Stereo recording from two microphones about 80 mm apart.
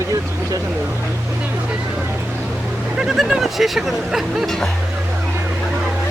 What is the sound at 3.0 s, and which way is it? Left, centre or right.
Speech, centre.